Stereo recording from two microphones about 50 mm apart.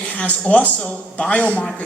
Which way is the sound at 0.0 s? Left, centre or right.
Left.